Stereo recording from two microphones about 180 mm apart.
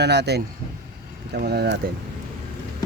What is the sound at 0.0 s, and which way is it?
Speech, 70° right (ahead or behind).